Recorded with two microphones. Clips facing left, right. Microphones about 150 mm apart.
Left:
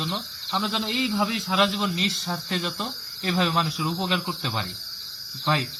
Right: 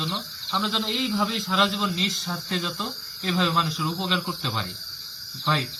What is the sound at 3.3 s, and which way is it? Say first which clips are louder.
Speech: even; 20° left (ahead or behind).